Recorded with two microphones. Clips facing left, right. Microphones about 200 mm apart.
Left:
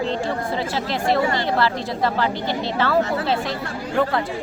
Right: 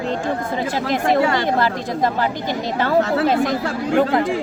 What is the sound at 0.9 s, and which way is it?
Speech, 15° right (ahead or behind).